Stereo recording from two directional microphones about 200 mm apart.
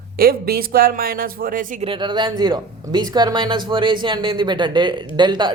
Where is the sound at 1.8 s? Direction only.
25° right (ahead or behind).